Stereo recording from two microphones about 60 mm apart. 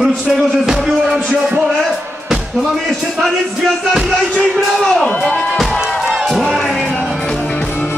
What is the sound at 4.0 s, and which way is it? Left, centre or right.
Music, centre.